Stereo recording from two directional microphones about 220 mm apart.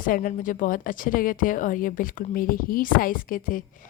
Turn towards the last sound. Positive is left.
turn(degrees=40)  # may be behind; listen again after turning